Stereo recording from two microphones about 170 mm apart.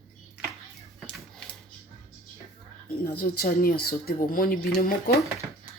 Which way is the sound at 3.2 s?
65° left (ahead or behind).